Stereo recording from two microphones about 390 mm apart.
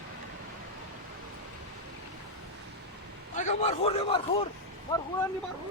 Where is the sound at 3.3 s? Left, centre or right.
Centre.